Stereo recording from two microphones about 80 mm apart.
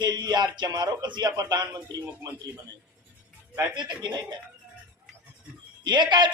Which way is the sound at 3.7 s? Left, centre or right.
Right.